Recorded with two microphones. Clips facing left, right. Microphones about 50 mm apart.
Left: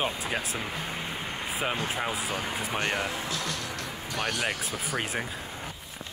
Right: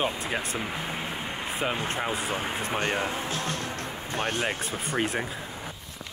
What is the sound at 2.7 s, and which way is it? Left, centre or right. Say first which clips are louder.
Speech: right 2 dB; right.